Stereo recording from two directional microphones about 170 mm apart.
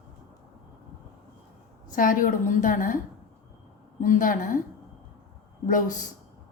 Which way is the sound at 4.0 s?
50° left (ahead or behind).